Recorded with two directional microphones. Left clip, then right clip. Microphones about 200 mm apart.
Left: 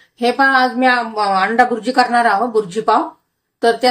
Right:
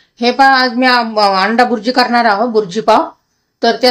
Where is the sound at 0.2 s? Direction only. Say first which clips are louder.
Right 4 dB; 15° right (ahead or behind).